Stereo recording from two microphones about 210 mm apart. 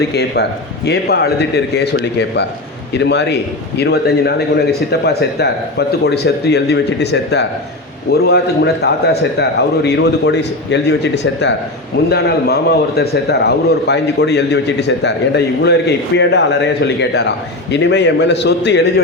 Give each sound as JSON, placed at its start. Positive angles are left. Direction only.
{"t": 0.1, "sound": "a man's voice", "side_deg": 50}